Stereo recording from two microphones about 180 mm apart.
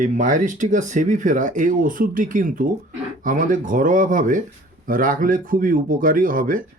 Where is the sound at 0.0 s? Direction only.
45° right (ahead or behind).